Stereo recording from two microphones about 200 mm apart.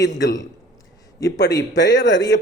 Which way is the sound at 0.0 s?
60° left (ahead or behind).